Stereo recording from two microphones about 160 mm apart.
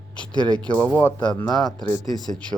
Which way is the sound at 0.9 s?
25° left (ahead or behind).